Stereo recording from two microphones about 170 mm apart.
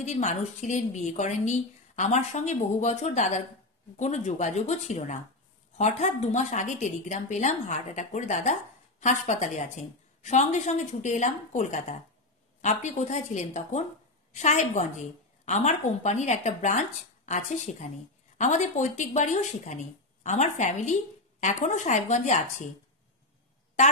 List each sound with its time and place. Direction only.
0.0 s a woman's voice: 40° left (ahead or behind)